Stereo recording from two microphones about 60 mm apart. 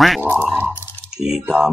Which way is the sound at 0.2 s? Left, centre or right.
Right.